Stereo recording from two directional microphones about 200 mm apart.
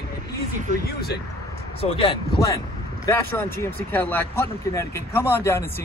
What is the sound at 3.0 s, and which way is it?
Speech, 10° left (ahead or behind).